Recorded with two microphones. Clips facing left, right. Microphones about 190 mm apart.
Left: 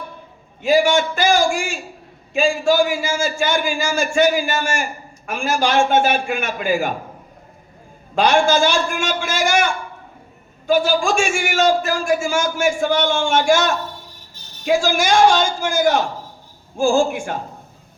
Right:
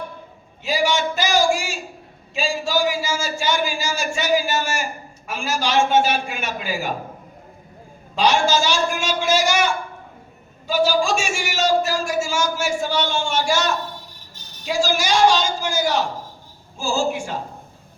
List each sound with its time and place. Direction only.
0.6 s a man's voice: 50° left (ahead or behind)
8.1 s a man's voice: 55° left (ahead or behind)